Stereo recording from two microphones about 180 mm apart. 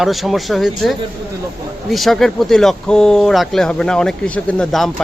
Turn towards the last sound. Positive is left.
turn(degrees=0)  # may be behind; listen again after turning